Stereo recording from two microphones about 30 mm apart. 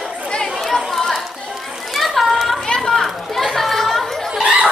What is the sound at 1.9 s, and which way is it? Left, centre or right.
Children playing, centre.